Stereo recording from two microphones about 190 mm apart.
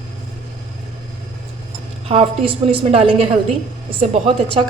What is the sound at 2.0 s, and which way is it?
A woman's voice, 30° right (ahead or behind).